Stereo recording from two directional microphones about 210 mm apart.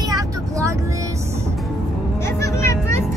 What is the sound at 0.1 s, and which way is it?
Vehicle, 15° right (ahead or behind).